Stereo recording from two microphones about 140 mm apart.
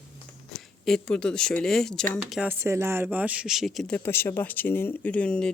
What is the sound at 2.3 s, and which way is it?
Speech, 10° right (ahead or behind).